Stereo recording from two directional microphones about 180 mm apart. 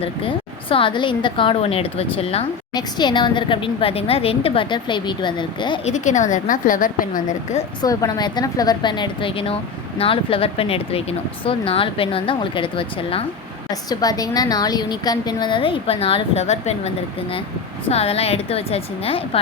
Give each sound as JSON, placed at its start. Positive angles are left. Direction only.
{"t": 0.0, "sound": "a woman's voice", "side_deg": 30}
{"t": 5.8, "sound": "a woman's voice", "side_deg": 40}
{"t": 7.8, "sound": "a woman's voice", "side_deg": 20}